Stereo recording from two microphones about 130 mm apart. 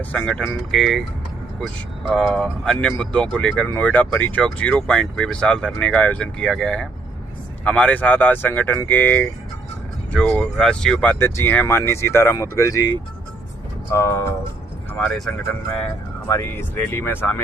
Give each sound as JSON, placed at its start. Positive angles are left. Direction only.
{"t": 0.0, "sound": "speech", "side_deg": 10}
{"t": 11.2, "sound": "speech", "side_deg": 15}
{"t": 13.9, "sound": "speech", "side_deg": 20}
{"t": 14.9, "sound": "speech", "side_deg": 5}
{"t": 16.2, "sound": "speech", "side_deg": 20}